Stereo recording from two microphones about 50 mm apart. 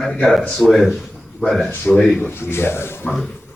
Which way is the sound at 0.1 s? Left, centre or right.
Centre.